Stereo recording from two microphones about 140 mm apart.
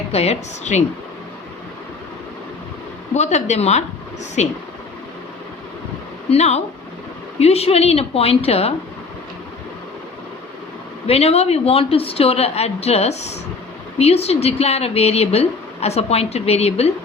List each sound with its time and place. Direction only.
0.1 s speech: 45° left (ahead or behind)
3.2 s speech: 55° left (ahead or behind)
6.3 s speech: 50° left (ahead or behind)
11.0 s speech: 45° left (ahead or behind)